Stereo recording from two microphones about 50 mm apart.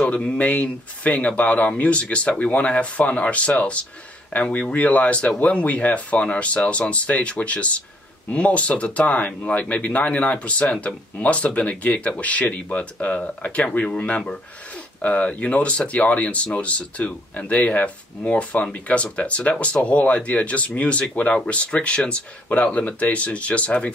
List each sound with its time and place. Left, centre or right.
0.1 s speech: left